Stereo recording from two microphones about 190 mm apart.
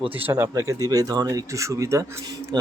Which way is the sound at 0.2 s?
10° right (ahead or behind).